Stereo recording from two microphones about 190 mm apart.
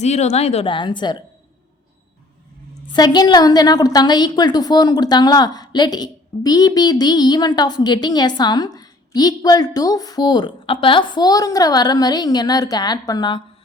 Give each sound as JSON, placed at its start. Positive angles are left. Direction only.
{"t": 0.0, "sound": "speech", "side_deg": 35}
{"t": 2.9, "sound": "a woman's voice", "side_deg": 20}